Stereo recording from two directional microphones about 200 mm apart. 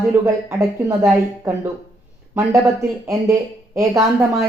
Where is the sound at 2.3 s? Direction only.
15° right (ahead or behind).